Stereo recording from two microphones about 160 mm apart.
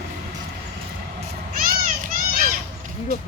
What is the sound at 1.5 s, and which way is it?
Children playing, 60° right (ahead or behind).